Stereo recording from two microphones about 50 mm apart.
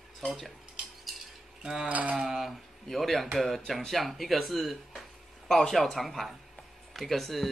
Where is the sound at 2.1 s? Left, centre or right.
Centre.